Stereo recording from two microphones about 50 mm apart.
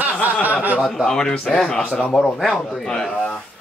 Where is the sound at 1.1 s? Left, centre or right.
Centre.